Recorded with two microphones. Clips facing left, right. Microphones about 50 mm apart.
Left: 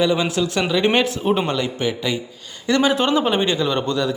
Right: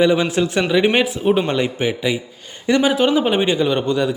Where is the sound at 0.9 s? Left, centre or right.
Centre.